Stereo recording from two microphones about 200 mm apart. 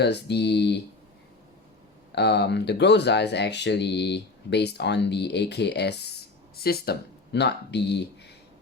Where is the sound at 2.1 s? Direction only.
55° left (ahead or behind).